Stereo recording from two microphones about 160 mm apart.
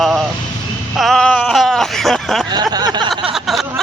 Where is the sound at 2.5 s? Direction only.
25° right (ahead or behind).